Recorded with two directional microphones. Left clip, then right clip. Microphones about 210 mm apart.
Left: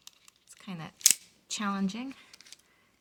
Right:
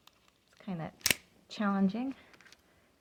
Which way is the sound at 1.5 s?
30° left (ahead or behind).